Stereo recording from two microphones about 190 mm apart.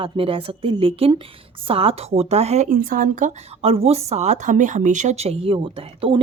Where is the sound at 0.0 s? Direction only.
30° right (ahead or behind).